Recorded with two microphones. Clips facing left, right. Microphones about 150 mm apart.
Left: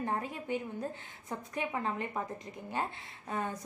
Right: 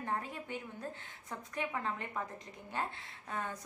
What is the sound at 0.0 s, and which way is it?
A woman's voice, 15° left (ahead or behind).